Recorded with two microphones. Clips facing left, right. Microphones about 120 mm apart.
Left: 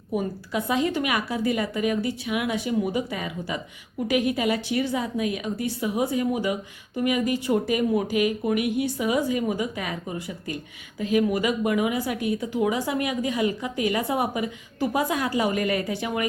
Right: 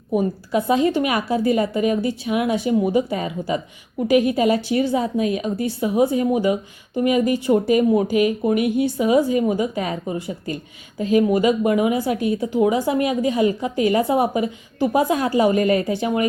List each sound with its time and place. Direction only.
0.5 s a woman's voice: 30° right (ahead or behind)